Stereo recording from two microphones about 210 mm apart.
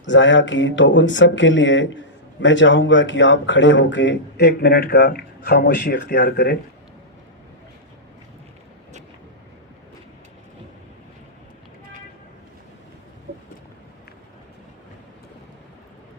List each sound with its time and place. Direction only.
0.0 s speech: 60° left (ahead or behind)